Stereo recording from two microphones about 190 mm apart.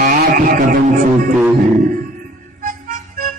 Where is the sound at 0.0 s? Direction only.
45° right (ahead or behind).